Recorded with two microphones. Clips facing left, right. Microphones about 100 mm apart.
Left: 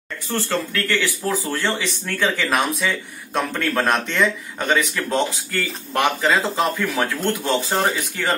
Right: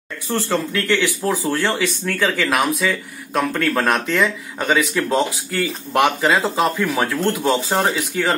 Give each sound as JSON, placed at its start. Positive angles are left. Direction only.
{"t": 0.3, "sound": "speech", "side_deg": -15}